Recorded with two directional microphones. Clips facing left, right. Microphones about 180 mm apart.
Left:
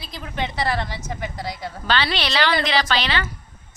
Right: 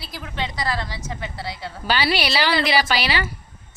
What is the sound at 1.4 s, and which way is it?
Speech, 45° left (ahead or behind).